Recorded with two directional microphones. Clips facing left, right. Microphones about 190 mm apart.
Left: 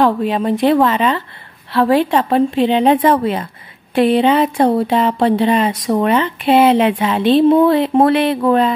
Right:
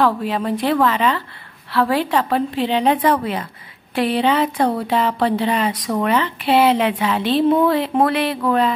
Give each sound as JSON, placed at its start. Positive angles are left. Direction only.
{"t": 0.0, "sound": "speech", "side_deg": 20}